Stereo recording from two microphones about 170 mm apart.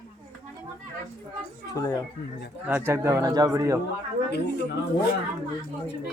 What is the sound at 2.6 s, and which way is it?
Speech, 15° right (ahead or behind).